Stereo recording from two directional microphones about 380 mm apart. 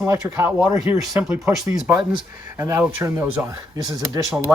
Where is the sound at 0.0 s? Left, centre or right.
Centre.